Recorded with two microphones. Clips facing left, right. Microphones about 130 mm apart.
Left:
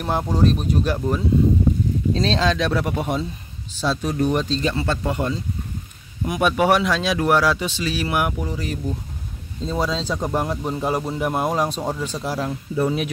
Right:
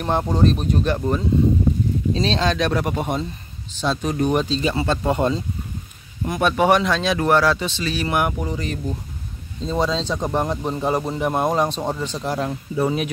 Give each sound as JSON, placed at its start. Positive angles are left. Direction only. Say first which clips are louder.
{"t": 0.0, "sound": "speech", "louder": "right 1 dB", "side_deg": 0}
{"t": 4.8, "sound": "speech", "louder": "right 3 dB", "side_deg": -25}
{"t": 6.2, "sound": "speech", "louder": "right 1 dB", "side_deg": 10}